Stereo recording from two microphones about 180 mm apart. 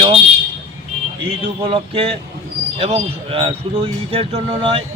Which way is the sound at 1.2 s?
30° right (ahead or behind).